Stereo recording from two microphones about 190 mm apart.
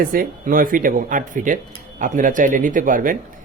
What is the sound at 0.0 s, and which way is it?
A man's voice, 50° right (ahead or behind).